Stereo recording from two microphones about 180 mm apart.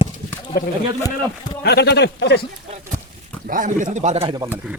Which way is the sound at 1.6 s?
65° left (ahead or behind).